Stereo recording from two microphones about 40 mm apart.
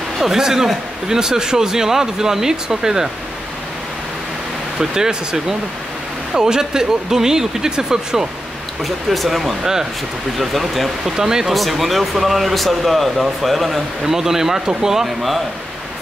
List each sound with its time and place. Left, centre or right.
0.2 s speech: centre
4.7 s speech: centre
8.8 s speech: centre
11.1 s speech: centre
11.5 s speech: centre